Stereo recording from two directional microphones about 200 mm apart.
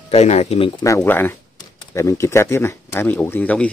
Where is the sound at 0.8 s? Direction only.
15° left (ahead or behind).